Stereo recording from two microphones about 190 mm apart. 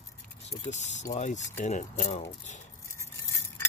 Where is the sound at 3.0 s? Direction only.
15° left (ahead or behind).